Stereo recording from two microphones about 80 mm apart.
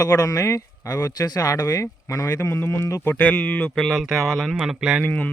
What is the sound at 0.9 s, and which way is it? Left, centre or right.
Speech, left.